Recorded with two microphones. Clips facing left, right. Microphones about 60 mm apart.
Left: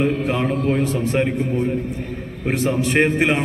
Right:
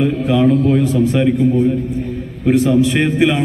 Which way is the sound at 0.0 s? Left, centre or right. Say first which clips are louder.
Right 6 dB; left.